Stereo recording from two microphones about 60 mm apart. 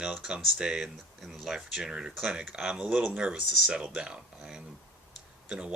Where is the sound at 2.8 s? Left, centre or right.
Right.